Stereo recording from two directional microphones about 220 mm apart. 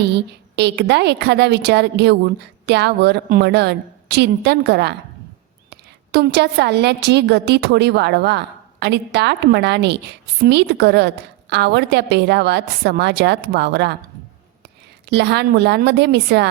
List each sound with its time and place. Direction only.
0.1 s a woman's voice: 50° right (ahead or behind)
15.0 s a woman's voice: 50° right (ahead or behind)